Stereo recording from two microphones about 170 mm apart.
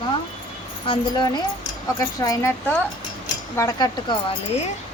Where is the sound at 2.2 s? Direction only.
20° left (ahead or behind).